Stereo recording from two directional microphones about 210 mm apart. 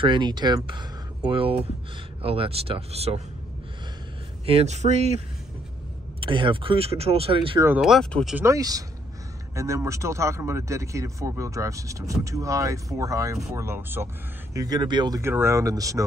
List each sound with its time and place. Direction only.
0.0 s speech: 20° right (ahead or behind)
4.5 s speech: 30° right (ahead or behind)
6.2 s speech: 25° right (ahead or behind)
7.6 s speech: 5° right (ahead or behind)
8.4 s speech: 15° right (ahead or behind)